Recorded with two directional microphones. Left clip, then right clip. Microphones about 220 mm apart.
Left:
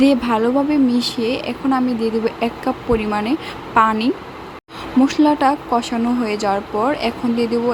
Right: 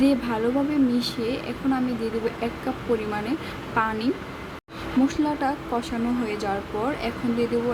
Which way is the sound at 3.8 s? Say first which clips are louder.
Left 10 dB; 20° left (ahead or behind).